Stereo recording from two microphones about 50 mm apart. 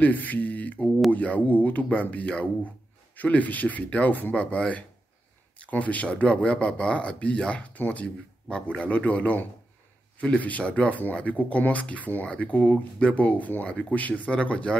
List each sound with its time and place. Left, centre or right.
0.0 s speech: left; by 7.6 s centre
7.7 s speech: left